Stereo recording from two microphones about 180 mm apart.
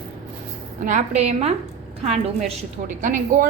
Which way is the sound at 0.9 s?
40° right (ahead or behind).